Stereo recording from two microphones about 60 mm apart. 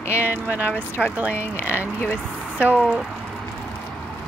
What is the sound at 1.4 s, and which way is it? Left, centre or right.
Speech, right.